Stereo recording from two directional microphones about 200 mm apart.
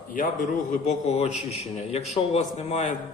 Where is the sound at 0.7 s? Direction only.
35° left (ahead or behind).